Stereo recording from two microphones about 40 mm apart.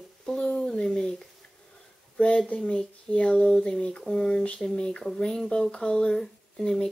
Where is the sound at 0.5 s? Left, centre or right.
Left.